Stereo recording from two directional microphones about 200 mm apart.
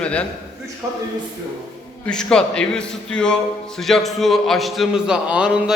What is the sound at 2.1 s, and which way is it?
A man's voice, 5° left (ahead or behind).